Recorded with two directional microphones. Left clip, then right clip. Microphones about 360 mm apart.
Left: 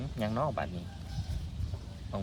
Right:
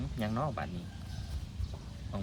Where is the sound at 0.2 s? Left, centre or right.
Centre.